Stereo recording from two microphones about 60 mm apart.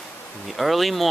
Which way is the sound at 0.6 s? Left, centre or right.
Centre.